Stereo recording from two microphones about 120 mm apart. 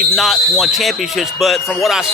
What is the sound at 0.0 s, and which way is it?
Speech, centre (ahead or behind).